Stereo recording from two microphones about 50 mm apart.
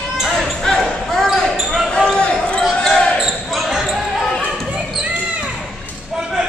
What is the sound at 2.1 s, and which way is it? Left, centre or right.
Basketball bounce, centre.